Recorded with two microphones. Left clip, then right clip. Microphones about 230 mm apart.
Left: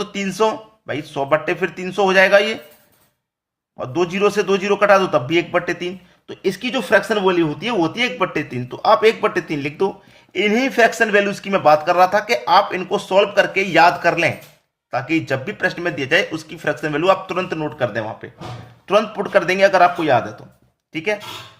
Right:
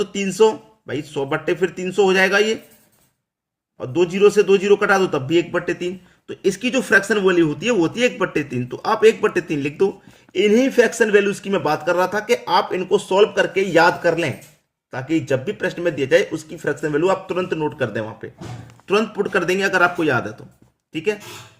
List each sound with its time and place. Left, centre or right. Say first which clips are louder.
0.0 s speech: right 3 dB; centre
3.8 s a man's voice: right 2 dB; centre